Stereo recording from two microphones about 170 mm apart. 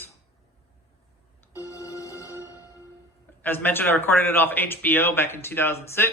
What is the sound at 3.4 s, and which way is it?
A man's voice, 10° left (ahead or behind).